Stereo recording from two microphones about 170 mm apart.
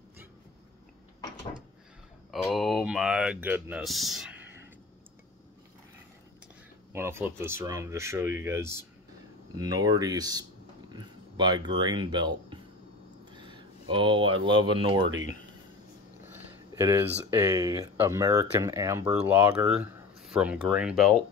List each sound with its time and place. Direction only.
2.3 s speech: centre (ahead or behind)
3.8 s speech: centre (ahead or behind)
6.9 s speech: 15° right (ahead or behind)
16.7 s speech: 20° right (ahead or behind)